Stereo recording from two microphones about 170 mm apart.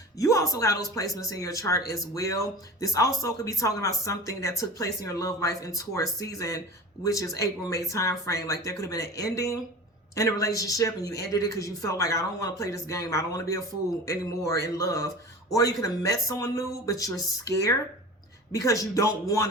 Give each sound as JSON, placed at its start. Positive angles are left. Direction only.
{"t": 0.2, "sound": "speech", "side_deg": 20}